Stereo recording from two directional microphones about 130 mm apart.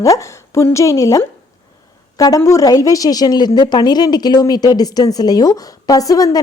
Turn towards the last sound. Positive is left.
turn(degrees=25)  # may be behind; listen again after turning